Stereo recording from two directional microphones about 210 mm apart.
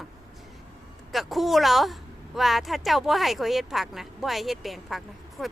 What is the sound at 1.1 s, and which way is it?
A woman's voice, centre (ahead or behind).